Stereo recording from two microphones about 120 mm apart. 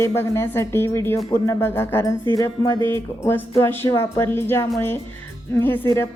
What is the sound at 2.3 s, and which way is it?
Music, 30° left (ahead or behind).